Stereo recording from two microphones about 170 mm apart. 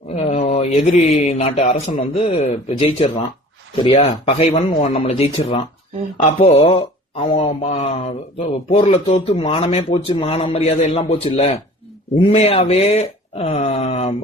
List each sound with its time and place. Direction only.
0.3 s a sound: 40° left (ahead or behind)
1.1 s speech: 40° left (ahead or behind)
2.1 s speech: 35° left (ahead or behind)